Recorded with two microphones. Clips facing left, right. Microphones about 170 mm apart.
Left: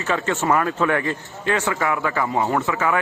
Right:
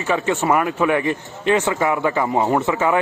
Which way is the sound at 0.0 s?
15° right (ahead or behind).